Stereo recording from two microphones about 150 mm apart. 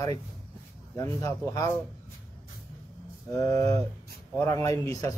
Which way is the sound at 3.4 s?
25° left (ahead or behind).